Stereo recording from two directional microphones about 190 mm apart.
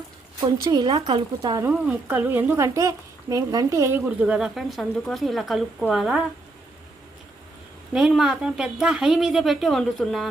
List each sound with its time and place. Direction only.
0.3 s speech: 20° right (ahead or behind)
1.7 s speech: 10° right (ahead or behind)
7.9 s speech: 5° right (ahead or behind)